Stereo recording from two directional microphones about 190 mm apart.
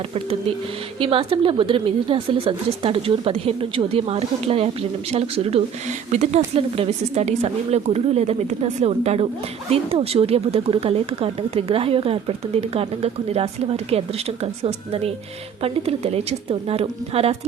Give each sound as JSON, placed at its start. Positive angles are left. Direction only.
{"t": 0.9, "sound": "a woman's voice", "side_deg": -30}